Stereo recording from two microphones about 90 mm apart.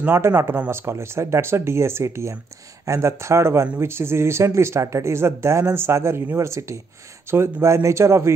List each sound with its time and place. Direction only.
0.0 s speech: 25° right (ahead or behind)